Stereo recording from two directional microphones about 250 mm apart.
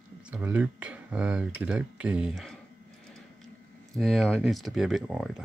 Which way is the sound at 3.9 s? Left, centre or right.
Centre.